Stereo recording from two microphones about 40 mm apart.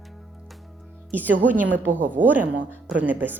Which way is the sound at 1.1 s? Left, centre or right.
Right.